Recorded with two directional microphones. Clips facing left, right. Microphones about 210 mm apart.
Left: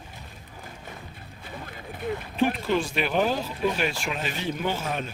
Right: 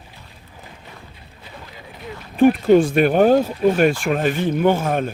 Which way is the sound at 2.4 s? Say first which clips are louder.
Right 12 dB; 50° right (ahead or behind).